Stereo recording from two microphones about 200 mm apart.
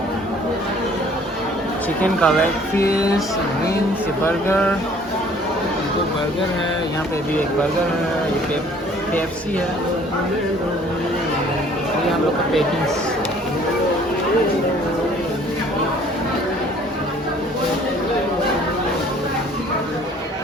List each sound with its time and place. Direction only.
2.2 s speech: 5° left (ahead or behind)
4.3 s speech: 10° left (ahead or behind)